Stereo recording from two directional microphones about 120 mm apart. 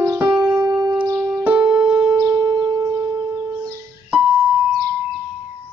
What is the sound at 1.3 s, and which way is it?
Keyboard, 10° right (ahead or behind).